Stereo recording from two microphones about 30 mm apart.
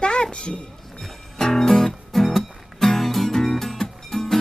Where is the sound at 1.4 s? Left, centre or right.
Centre.